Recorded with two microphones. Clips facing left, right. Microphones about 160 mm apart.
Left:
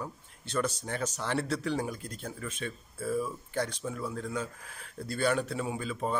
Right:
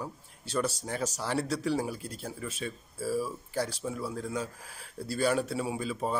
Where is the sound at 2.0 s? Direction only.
35° right (ahead or behind).